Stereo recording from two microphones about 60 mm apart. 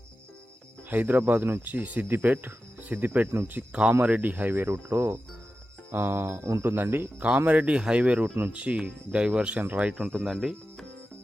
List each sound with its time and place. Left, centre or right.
0.9 s speech: right
1.6 s speech: right
7.3 s speech: right
9.9 s speech: centre